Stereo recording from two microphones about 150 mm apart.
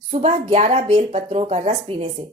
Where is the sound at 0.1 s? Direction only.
45° right (ahead or behind).